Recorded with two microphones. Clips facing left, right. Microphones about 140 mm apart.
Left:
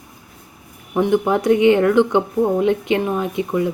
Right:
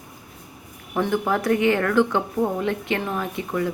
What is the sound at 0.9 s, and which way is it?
Speech, 20° left (ahead or behind).